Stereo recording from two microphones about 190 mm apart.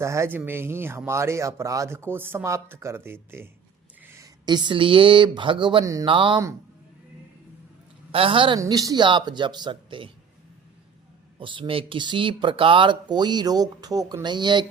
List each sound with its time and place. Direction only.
0.0 s speech: 15° right (ahead or behind)
8.1 s speech: 30° right (ahead or behind)
11.3 s speech: 25° right (ahead or behind)